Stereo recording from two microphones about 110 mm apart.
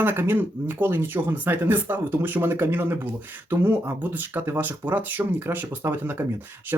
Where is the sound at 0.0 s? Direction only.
20° right (ahead or behind).